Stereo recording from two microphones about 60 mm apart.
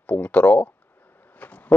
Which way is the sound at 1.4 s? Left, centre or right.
Left.